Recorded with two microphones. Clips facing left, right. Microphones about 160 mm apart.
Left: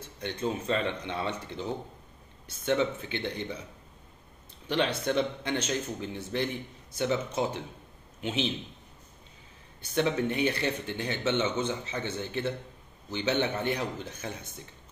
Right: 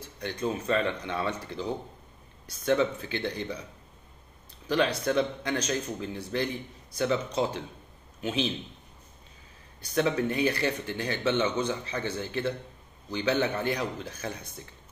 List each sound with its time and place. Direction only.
0.2 s speech: 25° left (ahead or behind)
4.6 s a man's voice: 25° left (ahead or behind)
9.8 s speech: 25° left (ahead or behind)